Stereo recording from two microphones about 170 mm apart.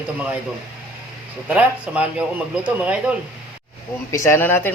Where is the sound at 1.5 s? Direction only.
5° right (ahead or behind).